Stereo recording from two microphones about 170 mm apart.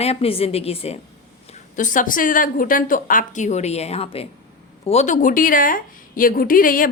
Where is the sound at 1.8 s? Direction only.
50° left (ahead or behind).